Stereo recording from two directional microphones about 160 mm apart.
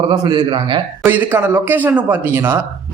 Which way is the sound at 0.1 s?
25° right (ahead or behind).